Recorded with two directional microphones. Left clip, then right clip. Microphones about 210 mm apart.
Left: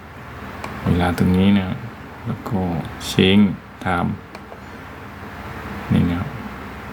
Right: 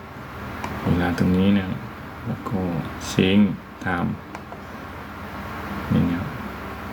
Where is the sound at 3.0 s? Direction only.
25° left (ahead or behind).